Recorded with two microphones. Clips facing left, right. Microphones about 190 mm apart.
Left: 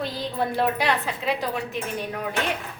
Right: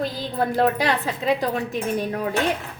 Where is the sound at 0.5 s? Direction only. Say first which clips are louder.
Right 4 dB; 40° right (ahead or behind).